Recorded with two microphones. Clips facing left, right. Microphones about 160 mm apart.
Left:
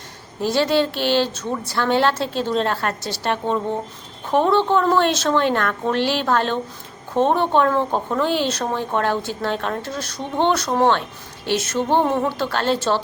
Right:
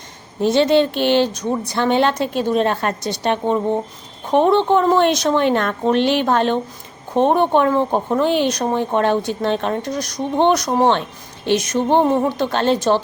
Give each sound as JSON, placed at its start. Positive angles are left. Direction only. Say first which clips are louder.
{"t": 0.4, "sound": "a woman's voice", "louder": "right 4 dB", "side_deg": -20}